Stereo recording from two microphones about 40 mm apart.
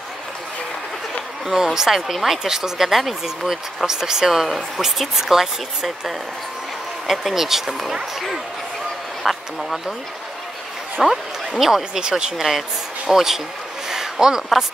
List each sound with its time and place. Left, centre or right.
1.4 s speech: centre
4.5 s speech: centre
4.8 s speech: centre
11.0 s speech: centre
12.0 s speech: centre
12.4 s speech: centre